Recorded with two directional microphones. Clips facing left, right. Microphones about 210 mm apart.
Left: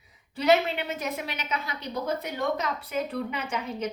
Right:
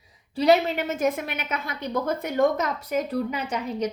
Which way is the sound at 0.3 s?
40° right (ahead or behind).